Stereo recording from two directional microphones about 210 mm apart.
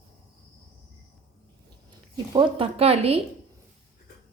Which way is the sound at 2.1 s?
20° right (ahead or behind).